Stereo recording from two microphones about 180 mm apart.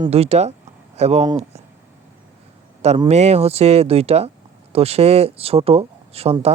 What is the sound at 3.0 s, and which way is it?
Speech, 35° right (ahead or behind).